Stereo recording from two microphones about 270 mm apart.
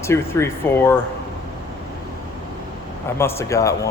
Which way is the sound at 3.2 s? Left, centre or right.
Centre.